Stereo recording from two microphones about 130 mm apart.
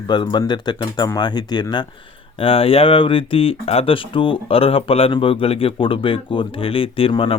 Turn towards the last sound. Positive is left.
turn(degrees=45)  # may be behind; listen again after turning